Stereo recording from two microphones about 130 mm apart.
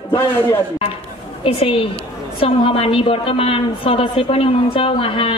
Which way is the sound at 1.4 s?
45° left (ahead or behind).